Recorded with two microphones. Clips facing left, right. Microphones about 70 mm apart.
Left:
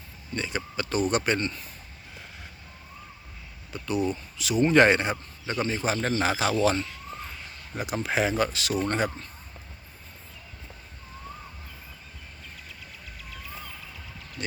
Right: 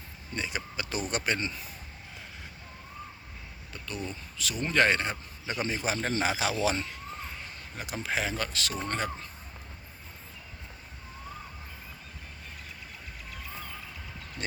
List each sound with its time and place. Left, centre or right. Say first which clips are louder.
0.3 s speech: left 4 dB; centre
3.7 s a sound: left 10 dB; centre
4.4 s speech: left 7 dB; centre
5.5 s speech: left 4 dB; centre
7.8 s speech: left 6 dB; centre